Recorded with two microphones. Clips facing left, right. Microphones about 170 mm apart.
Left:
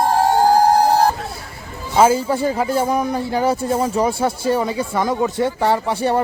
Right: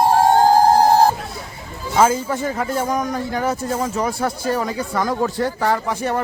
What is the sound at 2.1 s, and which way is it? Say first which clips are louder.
Speech: left 4 dB; 30° left (ahead or behind).